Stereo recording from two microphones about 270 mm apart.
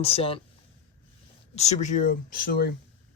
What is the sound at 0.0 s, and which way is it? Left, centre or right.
Speech, left.